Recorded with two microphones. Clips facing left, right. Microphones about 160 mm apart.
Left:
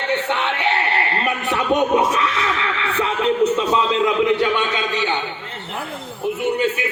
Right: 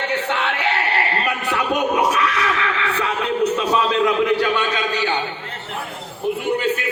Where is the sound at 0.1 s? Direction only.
25° left (ahead or behind).